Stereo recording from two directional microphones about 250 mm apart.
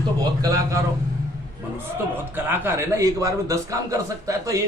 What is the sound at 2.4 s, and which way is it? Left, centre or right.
A man's voice, centre.